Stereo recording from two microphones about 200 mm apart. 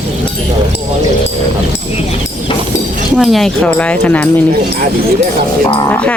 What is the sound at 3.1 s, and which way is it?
Speech, centre (ahead or behind).